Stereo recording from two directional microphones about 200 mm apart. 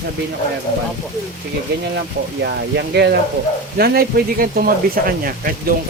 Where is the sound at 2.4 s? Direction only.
55° right (ahead or behind).